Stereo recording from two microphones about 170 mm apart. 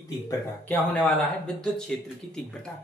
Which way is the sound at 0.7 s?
10° left (ahead or behind).